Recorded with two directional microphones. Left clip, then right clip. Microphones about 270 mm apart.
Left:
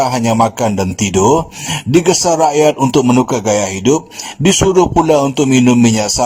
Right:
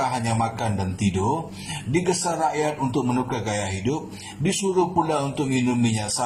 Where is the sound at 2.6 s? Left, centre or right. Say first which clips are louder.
Left 14 dB; left.